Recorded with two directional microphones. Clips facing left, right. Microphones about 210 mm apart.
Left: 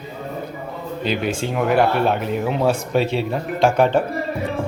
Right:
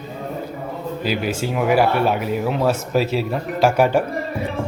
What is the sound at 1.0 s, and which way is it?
Speech, 5° right (ahead or behind).